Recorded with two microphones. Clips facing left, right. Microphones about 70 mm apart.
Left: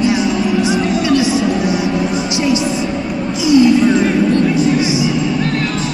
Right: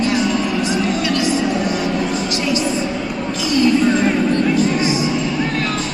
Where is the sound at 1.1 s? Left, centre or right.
Right.